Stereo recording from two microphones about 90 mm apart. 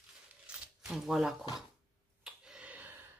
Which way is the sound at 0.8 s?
5° right (ahead or behind).